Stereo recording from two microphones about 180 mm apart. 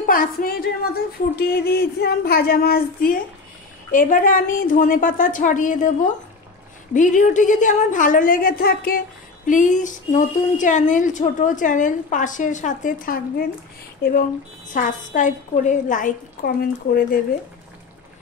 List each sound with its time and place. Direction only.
0.0 s a woman's voice: 50° left (ahead or behind)
1.4 s a sound: 60° left (ahead or behind)
3.9 s speech: 50° left (ahead or behind)
9.5 s speech: 45° left (ahead or behind)
14.7 s speech: 45° left (ahead or behind)